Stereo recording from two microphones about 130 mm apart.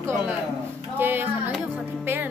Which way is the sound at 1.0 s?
15° right (ahead or behind).